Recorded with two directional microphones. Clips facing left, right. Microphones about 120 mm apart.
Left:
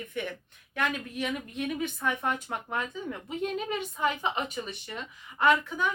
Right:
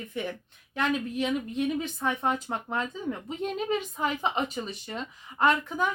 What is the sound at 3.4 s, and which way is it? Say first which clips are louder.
Speech: right 2 dB; 40° right (ahead or behind).